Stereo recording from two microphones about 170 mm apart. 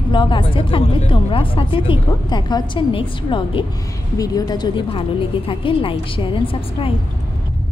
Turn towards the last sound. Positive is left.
turn(degrees=30)  # may be behind; listen again after turning